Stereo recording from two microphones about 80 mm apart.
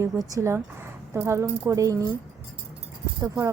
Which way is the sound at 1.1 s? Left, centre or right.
Right.